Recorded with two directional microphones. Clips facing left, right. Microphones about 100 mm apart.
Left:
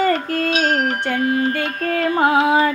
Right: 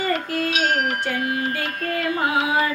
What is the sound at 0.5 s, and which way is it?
Music, 35° left (ahead or behind).